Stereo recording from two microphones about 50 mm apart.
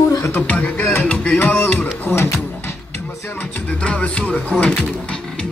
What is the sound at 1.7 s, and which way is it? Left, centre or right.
Music, left.